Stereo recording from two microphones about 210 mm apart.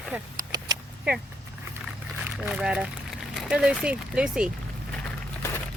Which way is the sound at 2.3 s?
5° right (ahead or behind).